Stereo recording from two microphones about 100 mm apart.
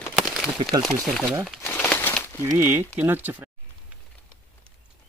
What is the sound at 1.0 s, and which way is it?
Speech, 5° left (ahead or behind).